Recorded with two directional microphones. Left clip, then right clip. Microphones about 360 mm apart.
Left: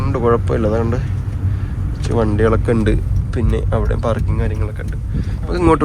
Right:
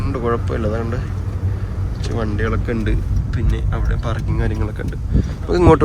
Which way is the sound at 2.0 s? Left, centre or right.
Centre.